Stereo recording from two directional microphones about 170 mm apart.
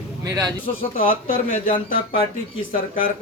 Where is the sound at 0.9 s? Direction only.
55° left (ahead or behind).